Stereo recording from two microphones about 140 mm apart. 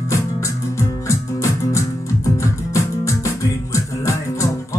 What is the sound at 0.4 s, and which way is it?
Music, 20° left (ahead or behind).